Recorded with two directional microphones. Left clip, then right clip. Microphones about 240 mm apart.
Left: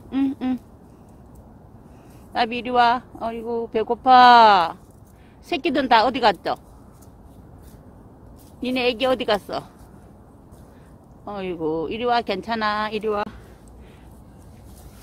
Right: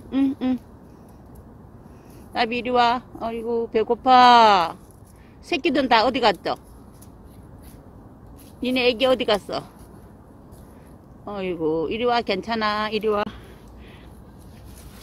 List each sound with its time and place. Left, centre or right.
0.1 s a sound: centre
2.3 s speech: centre
8.5 s speech: centre
11.2 s speech: centre